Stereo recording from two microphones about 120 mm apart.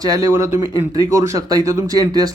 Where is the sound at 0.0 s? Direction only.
30° right (ahead or behind).